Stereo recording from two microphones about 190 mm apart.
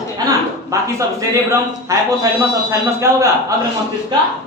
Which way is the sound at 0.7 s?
15° right (ahead or behind).